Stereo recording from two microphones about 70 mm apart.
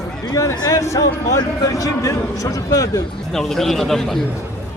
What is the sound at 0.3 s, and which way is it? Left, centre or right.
Speech, left.